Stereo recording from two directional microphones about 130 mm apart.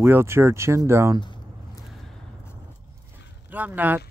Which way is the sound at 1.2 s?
35° left (ahead or behind).